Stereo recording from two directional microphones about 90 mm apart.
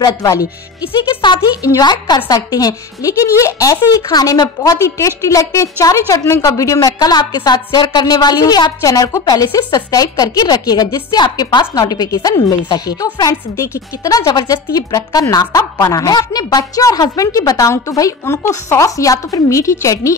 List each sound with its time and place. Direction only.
0.0 s a woman's voice: 40° left (ahead or behind)
1.2 s speech: 60° left (ahead or behind)
1.6 s a woman's voice: 45° left (ahead or behind)
4.1 s a woman's voice: 45° left (ahead or behind)